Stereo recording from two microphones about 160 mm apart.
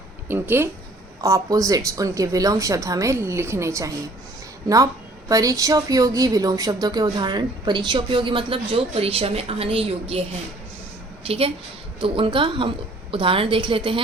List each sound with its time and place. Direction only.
0.3 s a woman's voice: 15° right (ahead or behind)
5.3 s a woman's voice: 20° right (ahead or behind)
11.3 s a woman's voice: 35° right (ahead or behind)